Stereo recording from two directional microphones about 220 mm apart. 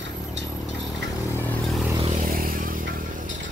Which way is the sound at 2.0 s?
30° right (ahead or behind).